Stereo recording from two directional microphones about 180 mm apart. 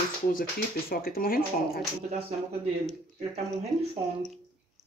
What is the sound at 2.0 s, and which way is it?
Speech, 40° right (ahead or behind).